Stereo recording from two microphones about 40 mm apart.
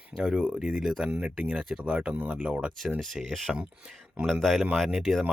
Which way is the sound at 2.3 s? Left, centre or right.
Right.